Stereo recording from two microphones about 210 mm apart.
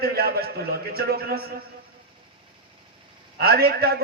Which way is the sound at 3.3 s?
50° right (ahead or behind).